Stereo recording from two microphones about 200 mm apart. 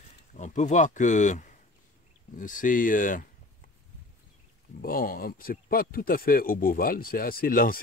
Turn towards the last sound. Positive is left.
turn(degrees=45)  # may be behind; listen again after turning